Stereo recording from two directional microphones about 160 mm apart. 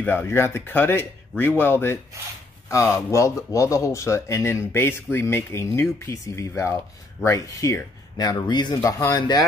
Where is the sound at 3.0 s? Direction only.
20° left (ahead or behind).